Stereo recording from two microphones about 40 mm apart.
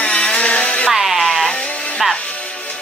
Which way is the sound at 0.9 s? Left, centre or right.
Centre.